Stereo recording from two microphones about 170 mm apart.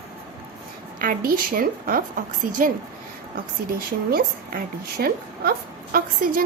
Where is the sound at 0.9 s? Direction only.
55° right (ahead or behind).